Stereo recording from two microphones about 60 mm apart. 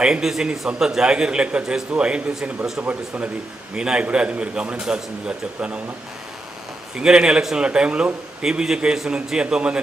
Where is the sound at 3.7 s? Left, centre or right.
Centre.